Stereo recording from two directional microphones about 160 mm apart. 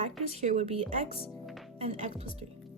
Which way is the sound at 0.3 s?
45° right (ahead or behind).